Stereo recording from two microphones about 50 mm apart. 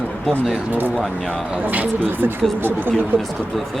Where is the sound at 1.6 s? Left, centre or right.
Right.